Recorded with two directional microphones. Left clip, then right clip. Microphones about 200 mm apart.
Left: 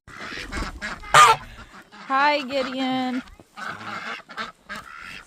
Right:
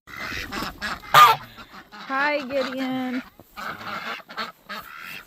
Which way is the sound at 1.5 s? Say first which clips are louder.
Right 2 dB; 35° right (ahead or behind).